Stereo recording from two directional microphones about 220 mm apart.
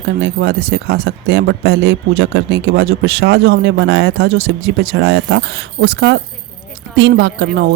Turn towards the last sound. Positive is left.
turn(degrees=-50)  # may be behind; listen again after turning